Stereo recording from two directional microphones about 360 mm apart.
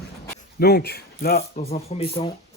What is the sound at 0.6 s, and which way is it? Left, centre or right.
Speech, left.